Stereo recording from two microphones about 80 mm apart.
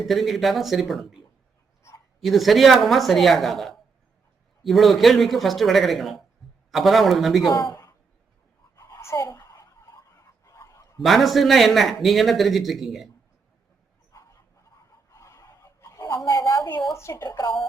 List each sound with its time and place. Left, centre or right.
0.0 s a man's voice: centre
2.2 s a man's voice: centre
7.5 s a woman's voice: left
8.7 s a sound: left
11.0 s a man's voice: centre
15.1 s a sound: left
17.2 s speech: left